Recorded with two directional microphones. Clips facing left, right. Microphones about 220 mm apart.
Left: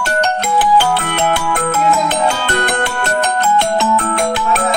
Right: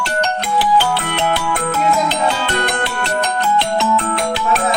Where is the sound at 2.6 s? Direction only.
50° left (ahead or behind).